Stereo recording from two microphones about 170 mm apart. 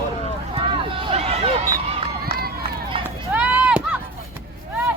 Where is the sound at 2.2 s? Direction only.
65° right (ahead or behind).